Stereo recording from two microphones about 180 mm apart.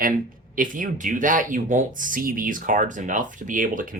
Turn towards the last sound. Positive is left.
turn(degrees=-50)  # may be behind; listen again after turning